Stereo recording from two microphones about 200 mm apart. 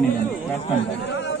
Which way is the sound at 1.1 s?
60° left (ahead or behind).